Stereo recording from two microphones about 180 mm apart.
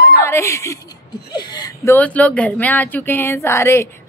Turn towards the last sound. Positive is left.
turn(degrees=15)  # may be behind; listen again after turning